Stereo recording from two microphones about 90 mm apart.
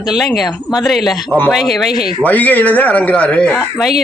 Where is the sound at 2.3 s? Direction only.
20° left (ahead or behind).